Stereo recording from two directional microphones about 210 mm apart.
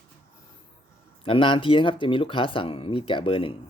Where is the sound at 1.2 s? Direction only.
25° left (ahead or behind).